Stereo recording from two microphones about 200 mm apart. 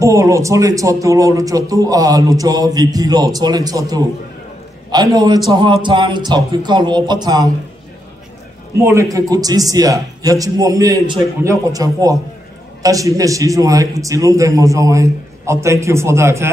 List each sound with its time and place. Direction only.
0.0 s speech: 15° right (ahead or behind)
8.8 s speech: 15° right (ahead or behind)